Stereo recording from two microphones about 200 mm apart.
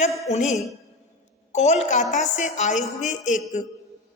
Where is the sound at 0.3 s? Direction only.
35° left (ahead or behind).